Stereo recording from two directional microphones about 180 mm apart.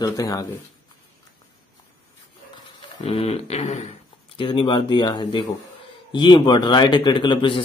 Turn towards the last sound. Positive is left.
turn(degrees=25)  # may be behind; listen again after turning